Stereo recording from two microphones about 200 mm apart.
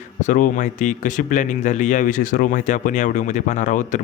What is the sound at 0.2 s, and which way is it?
Speech, 40° left (ahead or behind).